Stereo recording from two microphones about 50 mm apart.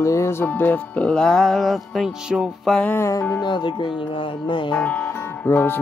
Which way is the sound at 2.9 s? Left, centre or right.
Left.